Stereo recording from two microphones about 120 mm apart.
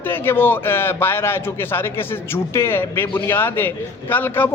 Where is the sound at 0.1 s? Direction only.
20° left (ahead or behind).